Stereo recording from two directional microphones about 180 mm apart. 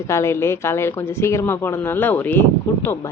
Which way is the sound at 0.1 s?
15° left (ahead or behind).